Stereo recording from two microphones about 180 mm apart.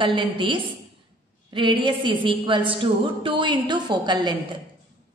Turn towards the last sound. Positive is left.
turn(degrees=-25)  # may be behind; listen again after turning